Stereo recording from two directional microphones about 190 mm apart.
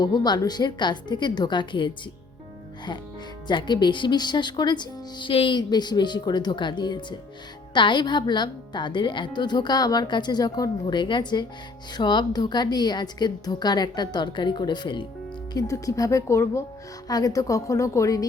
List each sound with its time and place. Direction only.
0.0 s speech: 20° left (ahead or behind)
3.4 s a woman's voice: 25° left (ahead or behind)